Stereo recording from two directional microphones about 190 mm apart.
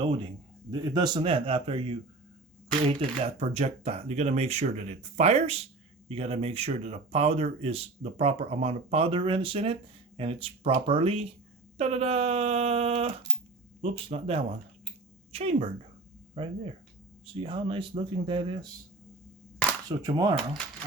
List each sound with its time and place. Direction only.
0.0 s speech: 25° right (ahead or behind)
17.2 s speech: 25° right (ahead or behind)
19.9 s speech: 20° right (ahead or behind)